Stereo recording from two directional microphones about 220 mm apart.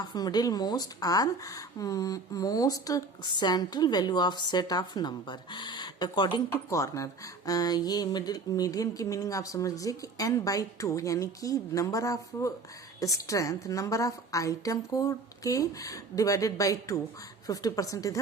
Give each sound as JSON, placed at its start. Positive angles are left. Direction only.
{"t": 0.0, "sound": "speech", "side_deg": 20}